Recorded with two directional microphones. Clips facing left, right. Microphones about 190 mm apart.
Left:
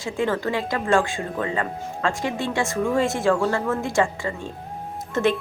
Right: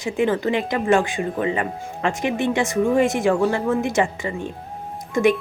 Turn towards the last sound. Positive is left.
turn(degrees=-15)  # may be behind; listen again after turning